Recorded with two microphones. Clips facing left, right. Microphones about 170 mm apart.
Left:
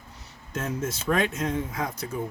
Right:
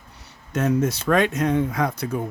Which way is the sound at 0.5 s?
70° right (ahead or behind).